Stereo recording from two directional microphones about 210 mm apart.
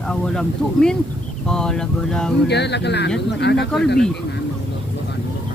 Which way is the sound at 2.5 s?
55° left (ahead or behind).